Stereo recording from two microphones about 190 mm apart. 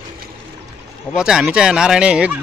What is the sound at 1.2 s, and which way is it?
Speech, 5° right (ahead or behind).